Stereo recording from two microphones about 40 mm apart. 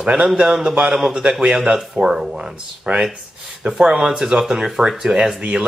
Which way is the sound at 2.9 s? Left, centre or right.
Right.